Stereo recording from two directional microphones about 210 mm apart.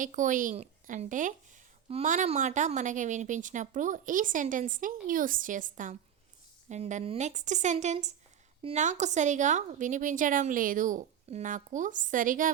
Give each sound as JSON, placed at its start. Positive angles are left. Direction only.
{"t": 0.0, "sound": "a woman's voice", "side_deg": -40}